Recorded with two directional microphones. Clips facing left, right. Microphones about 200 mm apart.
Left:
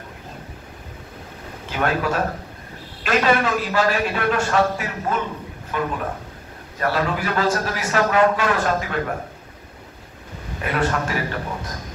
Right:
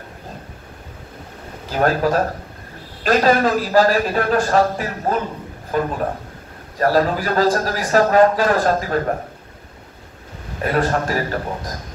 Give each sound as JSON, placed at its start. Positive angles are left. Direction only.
{"t": 1.7, "sound": "a man's voice", "side_deg": -40}
{"t": 10.6, "sound": "a man's voice", "side_deg": -40}